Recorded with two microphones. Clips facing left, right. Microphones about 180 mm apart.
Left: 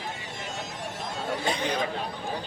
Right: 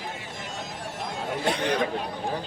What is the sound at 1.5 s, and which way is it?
Chatter, 70° right (ahead or behind).